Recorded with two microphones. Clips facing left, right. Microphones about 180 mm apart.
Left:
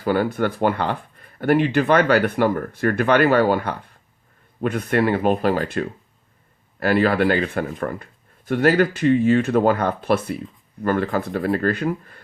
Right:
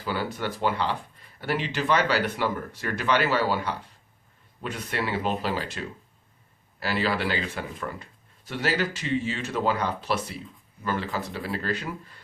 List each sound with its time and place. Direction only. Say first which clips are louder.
0.0 s speech: left 9 dB; 55° left (ahead or behind)